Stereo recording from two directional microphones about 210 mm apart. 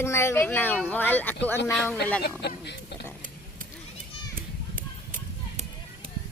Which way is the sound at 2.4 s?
50° left (ahead or behind).